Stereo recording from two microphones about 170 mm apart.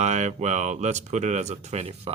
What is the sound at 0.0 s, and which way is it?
Speech, 45° right (ahead or behind).